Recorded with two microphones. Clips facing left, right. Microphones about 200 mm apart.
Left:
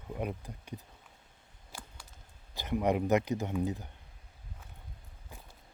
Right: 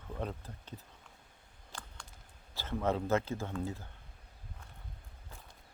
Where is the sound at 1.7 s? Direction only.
5° left (ahead or behind).